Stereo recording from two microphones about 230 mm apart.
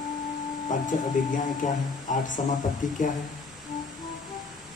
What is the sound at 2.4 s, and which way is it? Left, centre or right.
Speech, left.